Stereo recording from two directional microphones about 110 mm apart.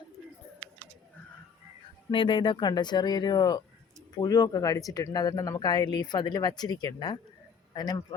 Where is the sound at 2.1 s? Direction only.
50° left (ahead or behind).